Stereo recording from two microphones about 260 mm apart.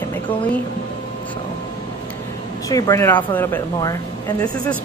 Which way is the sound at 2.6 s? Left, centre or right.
Centre.